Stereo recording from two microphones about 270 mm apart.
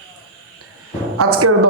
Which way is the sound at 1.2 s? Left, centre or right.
Right.